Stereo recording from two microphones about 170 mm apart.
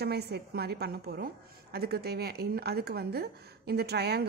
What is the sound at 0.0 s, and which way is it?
Speech, 70° right (ahead or behind).